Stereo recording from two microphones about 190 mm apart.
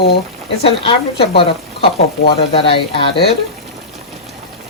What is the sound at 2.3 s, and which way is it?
Speech, 30° left (ahead or behind).